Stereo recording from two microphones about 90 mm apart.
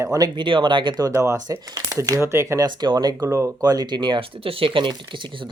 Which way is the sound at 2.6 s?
55° right (ahead or behind).